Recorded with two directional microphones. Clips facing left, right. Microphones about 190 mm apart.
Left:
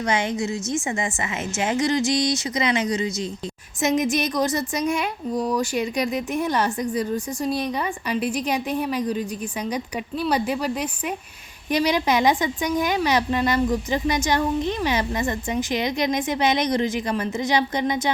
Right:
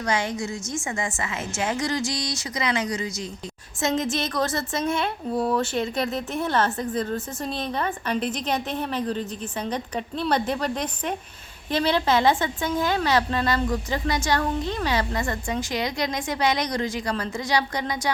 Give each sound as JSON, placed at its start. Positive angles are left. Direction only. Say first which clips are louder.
{"t": 0.1, "sound": "a woman's voice", "louder": "left 2 dB", "side_deg": 20}
{"t": 5.3, "sound": "speech", "louder": "even", "side_deg": -5}
{"t": 5.5, "sound": "a woman's voice", "louder": "left 1 dB", "side_deg": 10}